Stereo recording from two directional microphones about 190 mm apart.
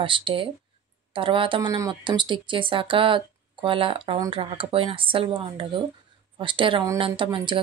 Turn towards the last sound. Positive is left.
turn(degrees=-25)  # may be behind; listen again after turning